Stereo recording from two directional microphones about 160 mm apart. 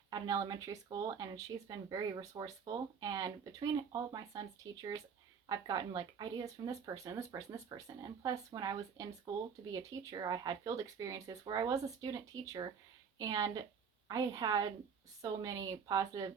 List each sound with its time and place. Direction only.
0.1 s speech: 25° right (ahead or behind)